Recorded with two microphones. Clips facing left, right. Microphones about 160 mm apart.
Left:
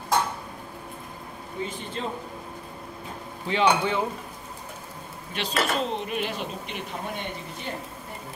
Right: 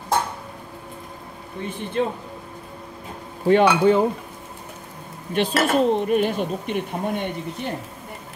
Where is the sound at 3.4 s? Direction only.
50° right (ahead or behind).